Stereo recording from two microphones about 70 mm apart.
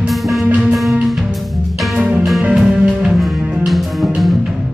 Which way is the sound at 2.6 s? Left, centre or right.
Centre.